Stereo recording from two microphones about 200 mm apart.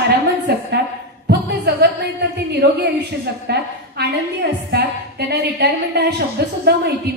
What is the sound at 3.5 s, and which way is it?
A woman's voice, 55° right (ahead or behind).